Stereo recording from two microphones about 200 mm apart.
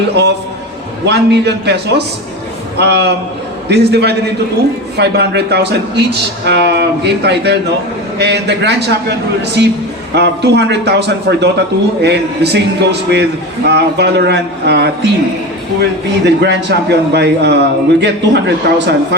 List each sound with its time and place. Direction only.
0.1 s a man's voice: 55° right (ahead or behind)